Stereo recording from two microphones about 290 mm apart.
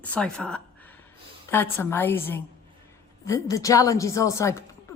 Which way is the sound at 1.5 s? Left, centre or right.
Centre.